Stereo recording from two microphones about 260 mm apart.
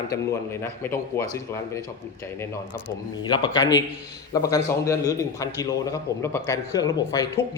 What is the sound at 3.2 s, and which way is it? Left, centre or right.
A man's voice, centre.